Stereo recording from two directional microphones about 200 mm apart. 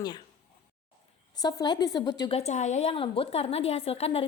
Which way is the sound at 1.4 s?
20° left (ahead or behind).